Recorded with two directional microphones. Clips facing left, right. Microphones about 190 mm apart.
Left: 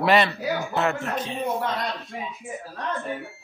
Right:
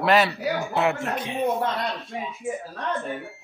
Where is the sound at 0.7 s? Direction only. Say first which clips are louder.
Right 2 dB; 10° right (ahead or behind).